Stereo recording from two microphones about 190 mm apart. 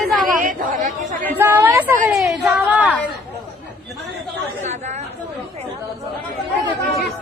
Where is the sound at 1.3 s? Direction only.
10° right (ahead or behind).